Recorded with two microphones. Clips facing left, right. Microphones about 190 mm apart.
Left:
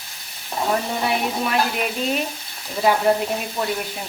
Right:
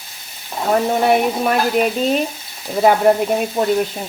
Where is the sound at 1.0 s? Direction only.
50° right (ahead or behind).